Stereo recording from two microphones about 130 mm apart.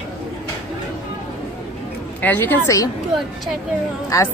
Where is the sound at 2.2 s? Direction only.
15° left (ahead or behind).